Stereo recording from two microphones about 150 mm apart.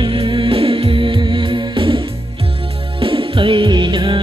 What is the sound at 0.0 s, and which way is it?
Music, 35° right (ahead or behind).